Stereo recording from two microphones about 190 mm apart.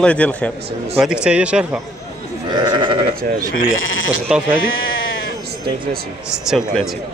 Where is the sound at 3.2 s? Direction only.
50° right (ahead or behind).